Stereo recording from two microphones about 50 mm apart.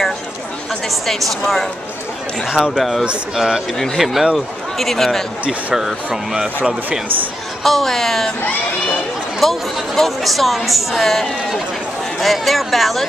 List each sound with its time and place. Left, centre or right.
0.8 s a woman's voice: centre
2.4 s speech: centre
4.7 s a woman's voice: centre
5.4 s speech: right
6.3 s speech: centre
7.6 s a woman's voice: centre
9.4 s a woman's voice: centre